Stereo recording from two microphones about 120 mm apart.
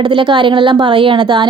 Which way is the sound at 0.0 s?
40° right (ahead or behind).